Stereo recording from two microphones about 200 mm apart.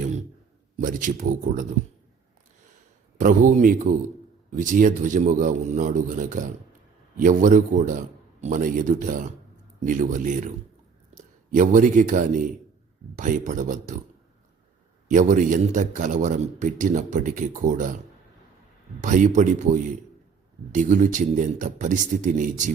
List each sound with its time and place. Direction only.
0.8 s a man's voice: 40° right (ahead or behind)
3.2 s a man's voice: 40° right (ahead or behind)
11.5 s a man's voice: 40° right (ahead or behind)
15.0 s a man's voice: 40° right (ahead or behind)
19.0 s a man's voice: 40° right (ahead or behind)